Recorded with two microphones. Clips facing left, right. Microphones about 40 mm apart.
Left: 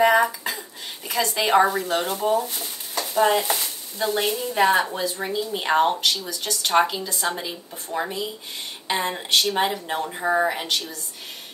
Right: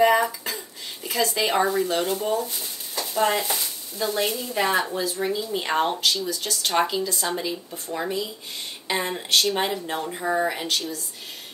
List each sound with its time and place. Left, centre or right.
0.0 s speech: centre
1.9 s speech: left
3.2 s speech: centre
3.5 s stir: centre
4.6 s speech: centre
4.9 s speech: left
5.2 s speech: centre